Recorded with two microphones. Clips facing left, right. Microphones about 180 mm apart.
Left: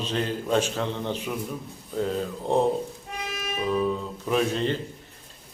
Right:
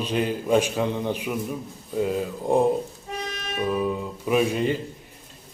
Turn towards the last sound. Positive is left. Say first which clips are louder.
# right 2 dB
turn(degrees=-10)  # may be behind; listen again after turning